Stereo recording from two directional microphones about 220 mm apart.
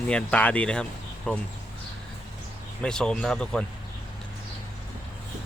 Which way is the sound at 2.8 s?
5° left (ahead or behind).